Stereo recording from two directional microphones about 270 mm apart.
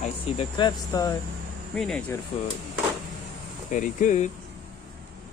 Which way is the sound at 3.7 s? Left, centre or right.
Left.